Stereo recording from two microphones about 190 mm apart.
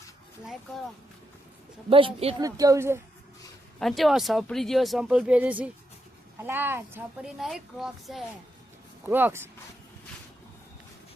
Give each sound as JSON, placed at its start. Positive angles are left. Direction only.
{"t": 1.9, "sound": "a woman's voice", "side_deg": -30}
{"t": 2.4, "sound": "a woman's voice", "side_deg": -20}
{"t": 3.8, "sound": "a woman's voice", "side_deg": 0}